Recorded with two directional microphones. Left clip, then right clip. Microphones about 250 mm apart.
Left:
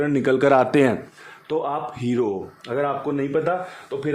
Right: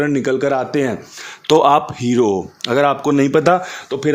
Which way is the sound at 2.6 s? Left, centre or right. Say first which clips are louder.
Right 9 dB; right.